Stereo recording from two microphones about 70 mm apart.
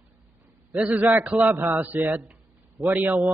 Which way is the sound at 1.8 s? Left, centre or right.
Right.